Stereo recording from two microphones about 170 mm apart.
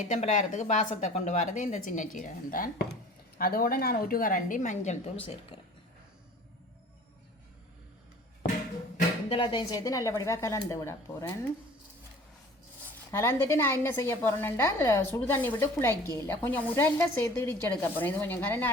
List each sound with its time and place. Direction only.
0.1 s speech: 45° left (ahead or behind)
9.3 s a woman's voice: 30° left (ahead or behind)
13.1 s a woman's voice: 15° left (ahead or behind)